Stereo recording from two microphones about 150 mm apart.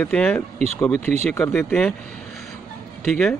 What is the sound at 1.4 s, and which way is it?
Speech, 10° left (ahead or behind).